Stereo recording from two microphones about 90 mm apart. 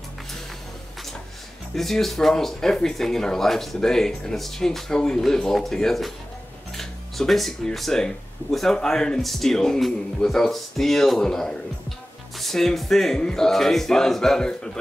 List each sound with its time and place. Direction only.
1.8 s speech: 5° left (ahead or behind)